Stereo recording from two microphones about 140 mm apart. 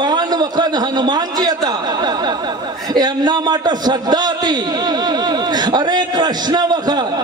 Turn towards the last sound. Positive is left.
turn(degrees=-30)  # may be behind; listen again after turning